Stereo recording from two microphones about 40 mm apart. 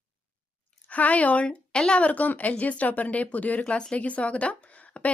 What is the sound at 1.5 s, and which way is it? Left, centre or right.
A woman's voice, left.